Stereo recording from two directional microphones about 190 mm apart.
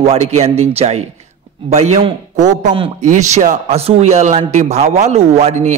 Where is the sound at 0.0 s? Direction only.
35° right (ahead or behind).